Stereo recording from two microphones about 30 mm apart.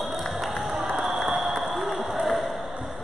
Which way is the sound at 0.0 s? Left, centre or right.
Centre.